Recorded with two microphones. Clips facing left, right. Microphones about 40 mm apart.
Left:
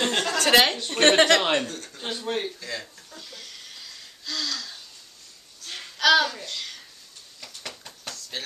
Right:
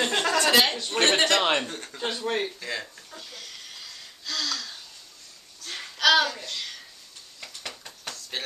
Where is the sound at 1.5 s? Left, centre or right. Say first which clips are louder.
Left 1 dB; right.